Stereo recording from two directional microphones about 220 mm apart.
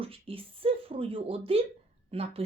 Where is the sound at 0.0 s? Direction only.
25° right (ahead or behind).